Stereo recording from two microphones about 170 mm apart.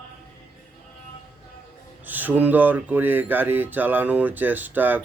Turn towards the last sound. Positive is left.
turn(degrees=-10)  # may be behind; listen again after turning